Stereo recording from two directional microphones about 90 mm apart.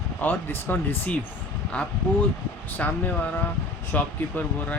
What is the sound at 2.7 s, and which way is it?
Speech, 20° left (ahead or behind).